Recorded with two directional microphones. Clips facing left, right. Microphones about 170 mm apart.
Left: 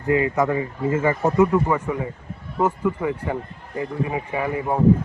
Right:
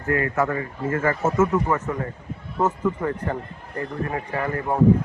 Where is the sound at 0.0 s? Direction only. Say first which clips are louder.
Left 3 dB; 20° left (ahead or behind).